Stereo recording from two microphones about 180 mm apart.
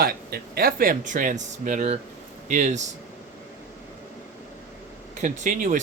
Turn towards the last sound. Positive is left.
turn(degrees=-45)  # may be behind; listen again after turning